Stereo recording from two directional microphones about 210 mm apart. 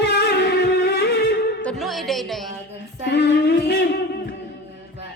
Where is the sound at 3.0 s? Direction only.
55° left (ahead or behind).